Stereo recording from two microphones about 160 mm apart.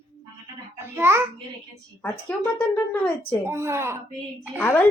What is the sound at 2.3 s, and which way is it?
Speech, 10° left (ahead or behind).